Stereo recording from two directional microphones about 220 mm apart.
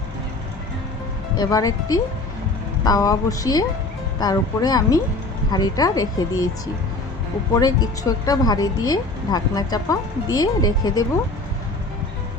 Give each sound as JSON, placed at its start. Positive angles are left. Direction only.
{"t": 1.4, "sound": "speech", "side_deg": 15}
{"t": 7.5, "sound": "speech", "side_deg": 15}